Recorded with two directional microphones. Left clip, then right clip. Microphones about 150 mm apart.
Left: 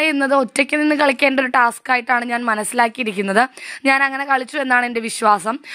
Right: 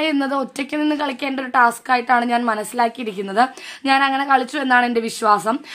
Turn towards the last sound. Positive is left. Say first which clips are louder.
# left 1 dB
turn(degrees=45)  # may be behind; listen again after turning